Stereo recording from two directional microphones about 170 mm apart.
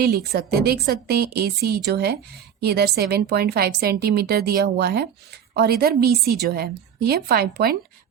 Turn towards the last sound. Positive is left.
turn(degrees=-65)  # may be behind; listen again after turning